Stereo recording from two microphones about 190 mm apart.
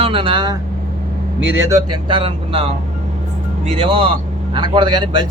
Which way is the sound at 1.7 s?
25° right (ahead or behind).